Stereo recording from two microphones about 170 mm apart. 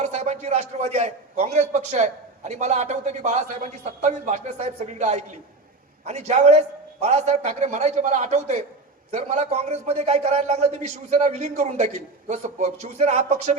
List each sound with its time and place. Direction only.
0.0 s a man's voice: 40° right (ahead or behind)